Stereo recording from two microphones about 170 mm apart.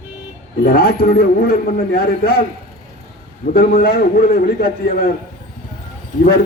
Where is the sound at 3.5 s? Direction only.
60° left (ahead or behind).